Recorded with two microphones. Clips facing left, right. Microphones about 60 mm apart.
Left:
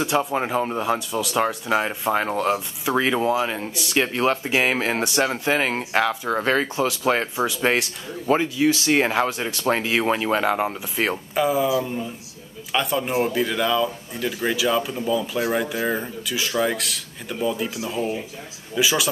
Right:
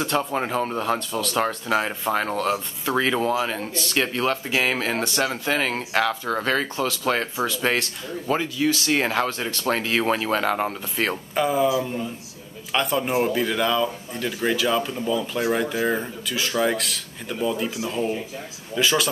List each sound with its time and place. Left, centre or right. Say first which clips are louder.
0.0 s speech: left 2 dB; centre
11.3 s speech: even; centre